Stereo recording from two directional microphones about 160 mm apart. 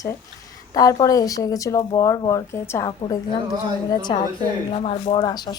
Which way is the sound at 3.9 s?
25° left (ahead or behind).